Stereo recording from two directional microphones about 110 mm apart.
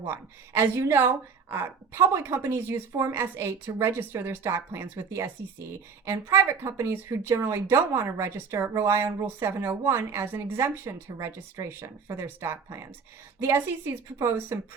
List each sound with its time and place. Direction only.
0.0 s speech: 25° right (ahead or behind)